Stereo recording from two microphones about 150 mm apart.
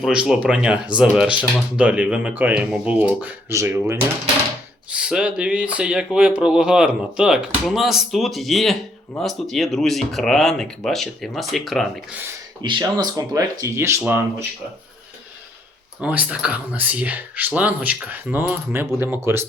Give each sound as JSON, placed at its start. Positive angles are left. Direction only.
{"t": 0.0, "sound": "speech", "side_deg": -5}
{"t": 12.6, "sound": "speech", "side_deg": -30}
{"t": 16.0, "sound": "speech", "side_deg": -10}